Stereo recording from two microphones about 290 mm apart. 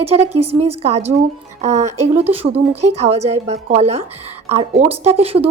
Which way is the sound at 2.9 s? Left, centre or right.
Right.